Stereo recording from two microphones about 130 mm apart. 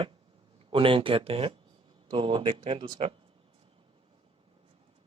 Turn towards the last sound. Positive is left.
turn(degrees=-45)  # may be behind; listen again after turning